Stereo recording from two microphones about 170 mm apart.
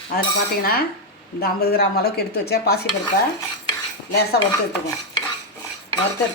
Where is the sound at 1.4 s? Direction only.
65° left (ahead or behind).